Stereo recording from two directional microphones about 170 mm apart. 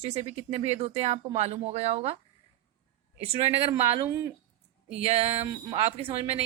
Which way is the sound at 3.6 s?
35° right (ahead or behind).